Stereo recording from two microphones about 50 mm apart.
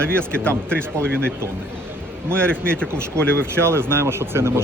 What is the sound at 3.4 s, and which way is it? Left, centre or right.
Speech, right.